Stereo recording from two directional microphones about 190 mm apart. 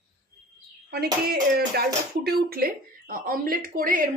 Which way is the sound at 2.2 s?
50° right (ahead or behind).